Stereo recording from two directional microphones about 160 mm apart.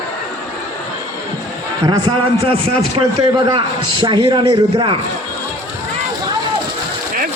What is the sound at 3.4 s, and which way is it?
A man's voice, 30° right (ahead or behind).